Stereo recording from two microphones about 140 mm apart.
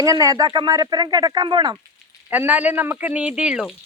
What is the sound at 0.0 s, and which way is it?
Speech, 25° right (ahead or behind).